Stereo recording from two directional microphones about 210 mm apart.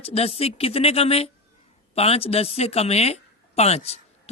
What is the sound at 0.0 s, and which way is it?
A woman's voice, 30° left (ahead or behind).